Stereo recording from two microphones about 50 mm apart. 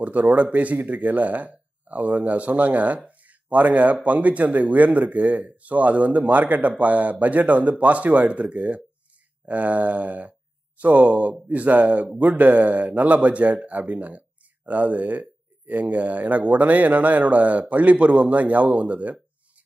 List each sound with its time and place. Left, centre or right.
0.0 s speech: right